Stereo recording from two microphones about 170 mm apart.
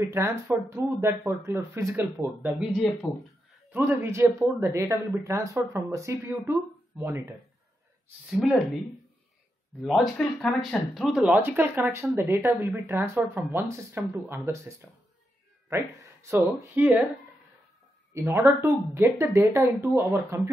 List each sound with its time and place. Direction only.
0.0 s speech: 15° right (ahead or behind)
3.7 s speech: 10° right (ahead or behind)
9.8 s speech: centre (ahead or behind)
18.1 s speech: 15° right (ahead or behind)